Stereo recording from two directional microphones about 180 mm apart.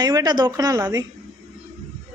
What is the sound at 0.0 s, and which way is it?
A woman's voice, 20° right (ahead or behind).